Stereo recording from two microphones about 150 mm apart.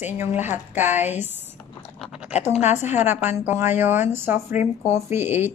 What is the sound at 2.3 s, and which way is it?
Speech, 50° left (ahead or behind).